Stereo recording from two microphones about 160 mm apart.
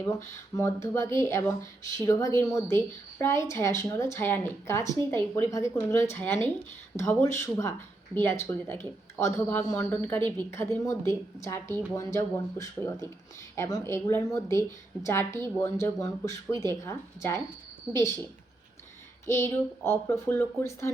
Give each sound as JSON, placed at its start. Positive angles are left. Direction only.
{"t": 0.5, "sound": "speech", "side_deg": 20}